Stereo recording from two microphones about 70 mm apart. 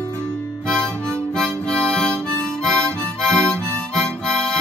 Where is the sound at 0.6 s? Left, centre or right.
Centre.